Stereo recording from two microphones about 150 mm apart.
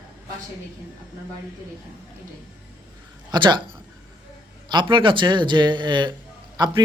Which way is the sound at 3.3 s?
30° right (ahead or behind).